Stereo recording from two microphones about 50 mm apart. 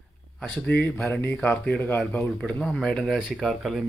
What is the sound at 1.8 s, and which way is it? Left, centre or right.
Speech, left.